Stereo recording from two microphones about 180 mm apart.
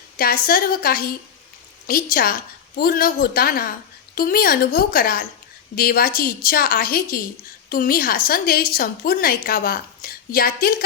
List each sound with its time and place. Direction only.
0.2 s a woman's voice: 55° left (ahead or behind)